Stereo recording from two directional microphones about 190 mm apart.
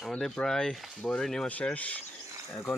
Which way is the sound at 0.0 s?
Centre (ahead or behind).